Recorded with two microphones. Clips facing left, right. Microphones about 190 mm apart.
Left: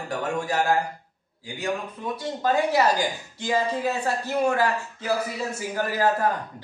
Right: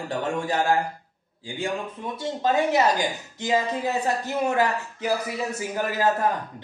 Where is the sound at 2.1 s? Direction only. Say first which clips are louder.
Even; 25° right (ahead or behind).